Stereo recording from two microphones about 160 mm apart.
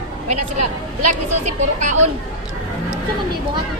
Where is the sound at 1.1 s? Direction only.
50° right (ahead or behind).